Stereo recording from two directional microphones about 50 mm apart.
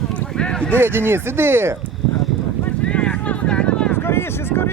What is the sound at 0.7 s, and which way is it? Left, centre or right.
Speech, right.